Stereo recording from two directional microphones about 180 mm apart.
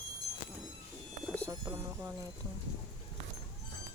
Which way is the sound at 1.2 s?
5° left (ahead or behind).